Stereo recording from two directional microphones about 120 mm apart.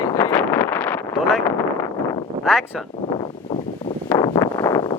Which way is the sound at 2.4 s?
Centre (ahead or behind).